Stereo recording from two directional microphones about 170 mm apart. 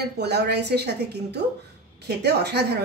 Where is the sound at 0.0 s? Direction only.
75° right (ahead or behind).